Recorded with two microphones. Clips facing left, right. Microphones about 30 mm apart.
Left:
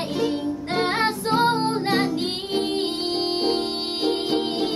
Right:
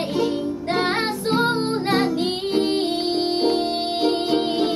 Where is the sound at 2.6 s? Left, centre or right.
Right.